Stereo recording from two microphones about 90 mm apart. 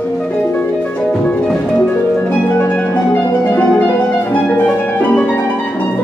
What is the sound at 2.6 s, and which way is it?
Harp, 15° left (ahead or behind).